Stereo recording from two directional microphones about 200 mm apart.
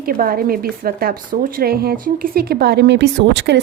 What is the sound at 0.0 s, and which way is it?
A woman's voice, 45° right (ahead or behind).